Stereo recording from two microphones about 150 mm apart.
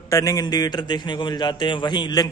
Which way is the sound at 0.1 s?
25° left (ahead or behind).